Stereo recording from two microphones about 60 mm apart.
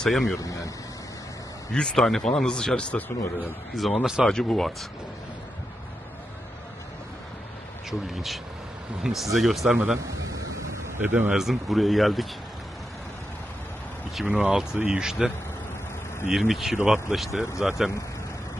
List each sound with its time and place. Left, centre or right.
0.0 s speech: centre
0.4 s speech: left
1.7 s speech: centre
3.7 s speech: centre
4.3 s speech: centre
8.1 s speech: centre
11.0 s a man's voice: right
11.2 s speech: centre
14.3 s speech: centre